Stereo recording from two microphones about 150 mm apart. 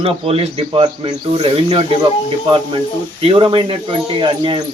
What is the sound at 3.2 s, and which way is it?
Speech, 35° right (ahead or behind).